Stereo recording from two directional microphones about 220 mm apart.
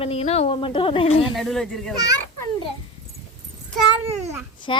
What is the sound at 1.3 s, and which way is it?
Speech, centre (ahead or behind).